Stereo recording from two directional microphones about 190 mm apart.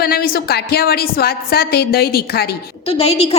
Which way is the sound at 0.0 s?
55° left (ahead or behind).